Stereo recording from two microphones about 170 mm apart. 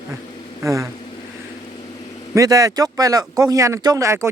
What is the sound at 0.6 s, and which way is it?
Speech, 20° right (ahead or behind).